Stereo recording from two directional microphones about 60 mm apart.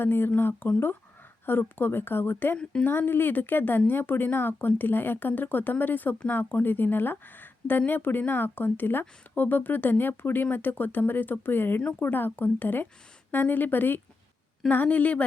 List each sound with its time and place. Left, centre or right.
0.0 s speech: left